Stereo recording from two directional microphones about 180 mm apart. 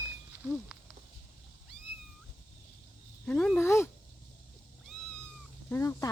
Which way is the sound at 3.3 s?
5° left (ahead or behind).